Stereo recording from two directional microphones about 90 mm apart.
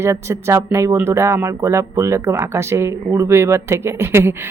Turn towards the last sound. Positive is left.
turn(degrees=-30)  # may be behind; listen again after turning